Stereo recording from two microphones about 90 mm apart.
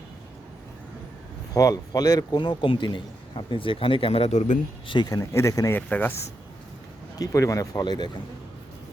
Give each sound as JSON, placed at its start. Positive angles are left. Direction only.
{"t": 1.5, "sound": "a man's voice", "side_deg": 45}
{"t": 4.9, "sound": "a man's voice", "side_deg": 55}
{"t": 5.1, "sound": "speech", "side_deg": 35}
{"t": 5.7, "sound": "speech", "side_deg": 20}
{"t": 7.2, "sound": "speech", "side_deg": 35}